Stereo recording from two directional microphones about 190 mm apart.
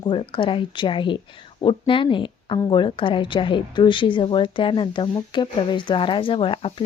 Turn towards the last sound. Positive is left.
turn(degrees=30)  # may be behind; listen again after turning